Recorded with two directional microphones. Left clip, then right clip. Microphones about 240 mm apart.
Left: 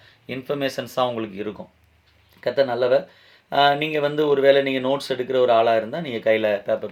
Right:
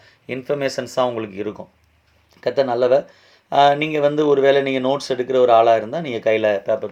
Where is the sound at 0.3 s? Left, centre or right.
Right.